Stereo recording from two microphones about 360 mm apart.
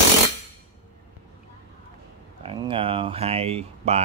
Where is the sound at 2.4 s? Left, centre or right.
Centre.